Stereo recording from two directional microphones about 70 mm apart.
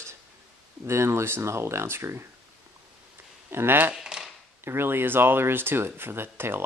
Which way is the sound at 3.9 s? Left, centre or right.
Centre.